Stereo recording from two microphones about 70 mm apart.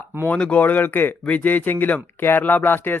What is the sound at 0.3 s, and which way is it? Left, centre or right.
Speech, centre.